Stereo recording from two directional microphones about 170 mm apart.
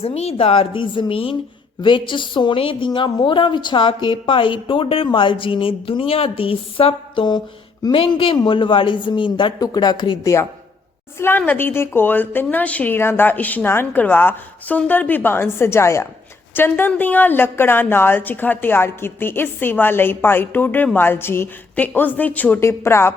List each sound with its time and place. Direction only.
0.0 s a woman's voice: 35° left (ahead or behind); by 10.4 s 20° left (ahead or behind)
11.2 s a woman's voice: 10° left (ahead or behind)